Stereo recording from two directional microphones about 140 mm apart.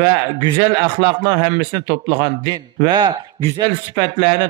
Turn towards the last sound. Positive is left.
turn(degrees=-35)  # may be behind; listen again after turning